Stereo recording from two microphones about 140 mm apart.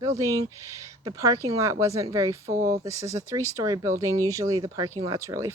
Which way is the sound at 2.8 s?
20° right (ahead or behind).